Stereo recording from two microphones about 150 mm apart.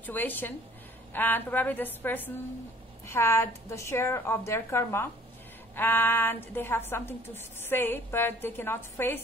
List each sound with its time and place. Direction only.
0.0 s a woman's voice: 10° left (ahead or behind)